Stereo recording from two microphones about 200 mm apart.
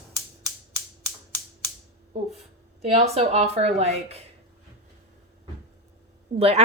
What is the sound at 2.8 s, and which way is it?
A woman's voice, 30° right (ahead or behind).